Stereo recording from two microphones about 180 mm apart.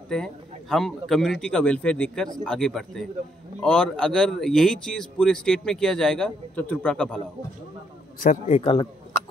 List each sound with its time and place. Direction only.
0.1 s speech: 5° left (ahead or behind)
8.2 s a man's voice: 45° left (ahead or behind)
8.5 s speech: 30° left (ahead or behind)